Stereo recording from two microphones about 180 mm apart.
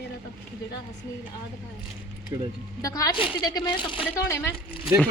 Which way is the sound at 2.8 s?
20° left (ahead or behind).